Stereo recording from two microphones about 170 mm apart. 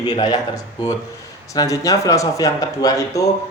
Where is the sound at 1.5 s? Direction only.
20° left (ahead or behind).